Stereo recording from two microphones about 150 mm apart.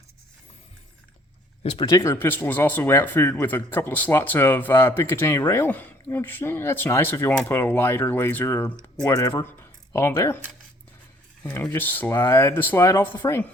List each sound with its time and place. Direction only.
1.6 s speech: 30° left (ahead or behind)
2.0 s a man's voice: 15° left (ahead or behind)
11.7 s a man's voice: 10° left (ahead or behind)